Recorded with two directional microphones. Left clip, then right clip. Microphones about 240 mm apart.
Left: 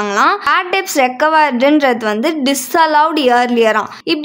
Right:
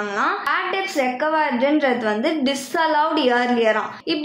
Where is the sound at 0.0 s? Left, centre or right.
Left.